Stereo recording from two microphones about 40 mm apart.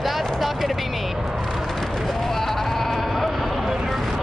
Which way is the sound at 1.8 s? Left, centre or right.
Centre.